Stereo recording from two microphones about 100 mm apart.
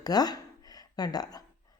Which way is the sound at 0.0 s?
40° left (ahead or behind).